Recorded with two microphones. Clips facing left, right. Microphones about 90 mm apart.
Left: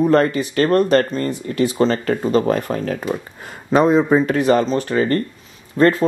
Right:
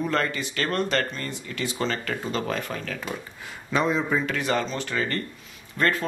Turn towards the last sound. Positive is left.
turn(degrees=30)  # may be behind; listen again after turning